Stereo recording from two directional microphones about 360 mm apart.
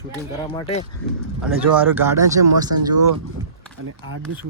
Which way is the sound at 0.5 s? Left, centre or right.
Centre.